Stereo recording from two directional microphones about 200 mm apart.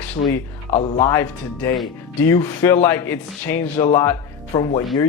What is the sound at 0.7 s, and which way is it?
Speech, 30° left (ahead or behind).